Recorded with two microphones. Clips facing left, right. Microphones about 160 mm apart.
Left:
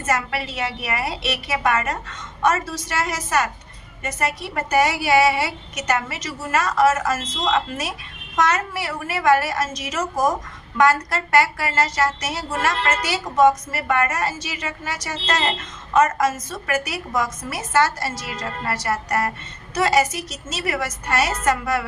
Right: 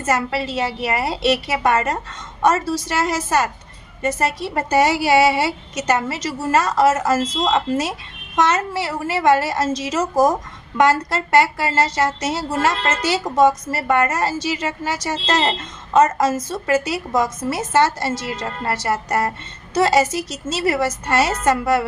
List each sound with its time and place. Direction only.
0.0 s a woman's voice: 30° right (ahead or behind)